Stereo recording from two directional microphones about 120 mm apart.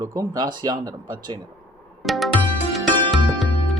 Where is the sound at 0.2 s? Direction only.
35° right (ahead or behind).